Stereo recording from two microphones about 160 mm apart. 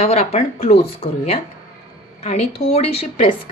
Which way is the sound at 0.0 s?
40° left (ahead or behind).